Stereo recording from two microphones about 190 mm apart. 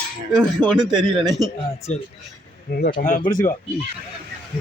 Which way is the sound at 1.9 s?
40° left (ahead or behind).